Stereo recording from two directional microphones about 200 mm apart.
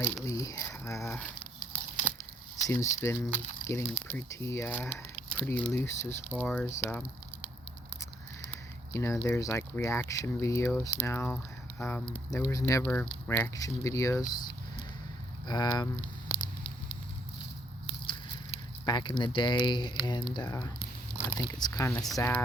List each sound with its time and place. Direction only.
0.0 s speech: 10° left (ahead or behind)
1.7 s tearing: 5° left (ahead or behind)
2.6 s speech: 15° left (ahead or behind)
8.4 s speech: 10° left (ahead or behind)
18.9 s speech: 20° left (ahead or behind)
20.7 s a sound: 5° left (ahead or behind)
21.3 s speech: 20° left (ahead or behind)